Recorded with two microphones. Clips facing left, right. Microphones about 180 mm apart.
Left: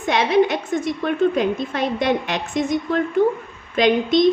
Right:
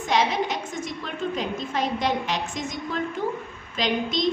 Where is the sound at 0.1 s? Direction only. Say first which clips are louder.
Left 7 dB; 60° left (ahead or behind).